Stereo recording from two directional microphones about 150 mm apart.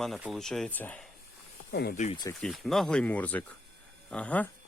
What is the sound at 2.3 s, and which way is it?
Speech, centre (ahead or behind).